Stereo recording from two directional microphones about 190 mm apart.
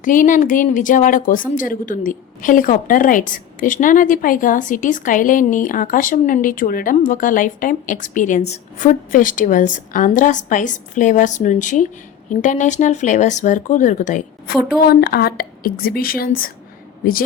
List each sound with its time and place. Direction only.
0.0 s a woman's voice: 45° left (ahead or behind)
14.8 s a woman's voice: 55° left (ahead or behind)